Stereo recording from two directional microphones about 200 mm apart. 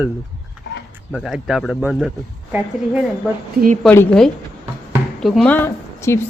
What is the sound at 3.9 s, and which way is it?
A woman's voice, 5° left (ahead or behind).